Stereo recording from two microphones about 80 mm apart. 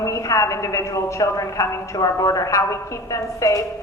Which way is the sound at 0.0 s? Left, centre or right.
Left.